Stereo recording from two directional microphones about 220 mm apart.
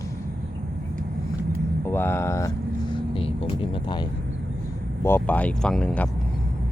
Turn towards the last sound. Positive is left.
turn(degrees=5)  # may be behind; listen again after turning